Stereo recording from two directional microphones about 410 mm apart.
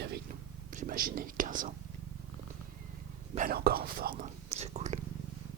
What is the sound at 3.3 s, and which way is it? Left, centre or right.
Speech, right.